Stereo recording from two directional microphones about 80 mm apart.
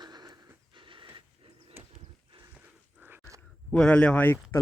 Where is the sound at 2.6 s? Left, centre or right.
Right.